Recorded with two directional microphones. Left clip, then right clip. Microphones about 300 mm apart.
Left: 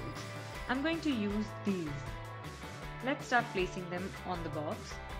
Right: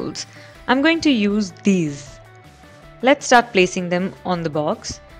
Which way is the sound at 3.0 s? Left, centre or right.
Right.